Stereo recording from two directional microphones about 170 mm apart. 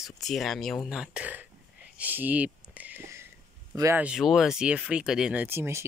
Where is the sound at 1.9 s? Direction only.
10° right (ahead or behind).